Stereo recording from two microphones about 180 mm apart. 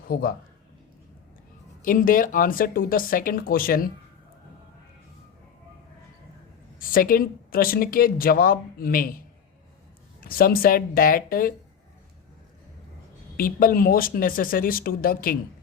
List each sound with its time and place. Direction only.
0.1 s a man's voice: 55° left (ahead or behind)
1.8 s speech: 50° left (ahead or behind)
6.7 s speech: 50° left (ahead or behind)
10.2 s speech: 55° left (ahead or behind)
13.3 s speech: 50° left (ahead or behind)